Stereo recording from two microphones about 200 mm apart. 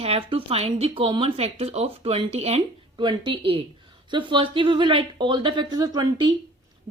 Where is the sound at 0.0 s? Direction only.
30° right (ahead or behind).